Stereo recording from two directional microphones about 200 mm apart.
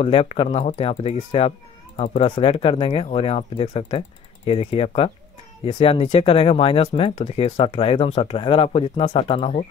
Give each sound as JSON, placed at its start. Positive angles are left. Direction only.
{"t": 0.0, "sound": "speech", "side_deg": 30}